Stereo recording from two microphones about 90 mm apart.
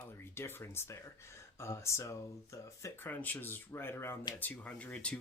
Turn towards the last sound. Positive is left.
turn(degrees=15)  # may be behind; listen again after turning